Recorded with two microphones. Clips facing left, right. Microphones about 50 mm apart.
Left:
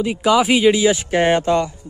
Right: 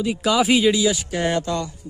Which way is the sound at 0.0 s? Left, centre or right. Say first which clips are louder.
Left 3 dB; centre.